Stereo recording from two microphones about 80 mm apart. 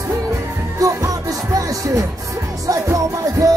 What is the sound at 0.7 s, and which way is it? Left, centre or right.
Music, right.